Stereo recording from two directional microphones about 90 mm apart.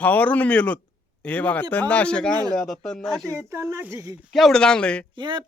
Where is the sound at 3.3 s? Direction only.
30° right (ahead or behind).